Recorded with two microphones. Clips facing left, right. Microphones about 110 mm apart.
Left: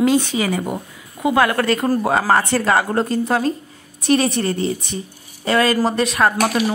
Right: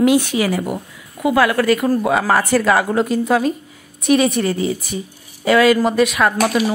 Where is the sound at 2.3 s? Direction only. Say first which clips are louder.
Right 2 dB; 25° left (ahead or behind).